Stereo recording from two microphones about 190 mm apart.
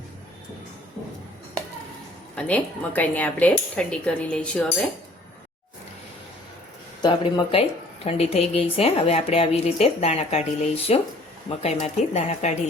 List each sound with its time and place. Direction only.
2.3 s a woman's voice: 5° left (ahead or behind)
7.0 s a woman's voice: 25° left (ahead or behind)